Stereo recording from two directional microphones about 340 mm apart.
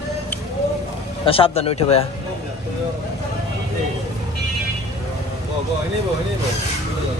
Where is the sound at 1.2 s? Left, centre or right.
Centre.